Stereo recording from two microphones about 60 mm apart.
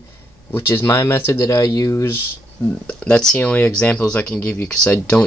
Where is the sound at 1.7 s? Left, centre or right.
Left.